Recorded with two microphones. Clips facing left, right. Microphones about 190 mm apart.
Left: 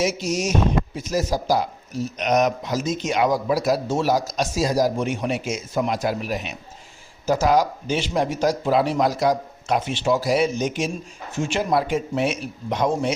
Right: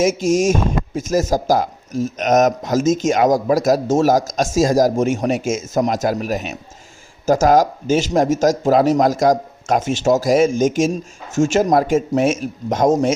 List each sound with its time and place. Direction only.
0.0 s speech: 50° right (ahead or behind)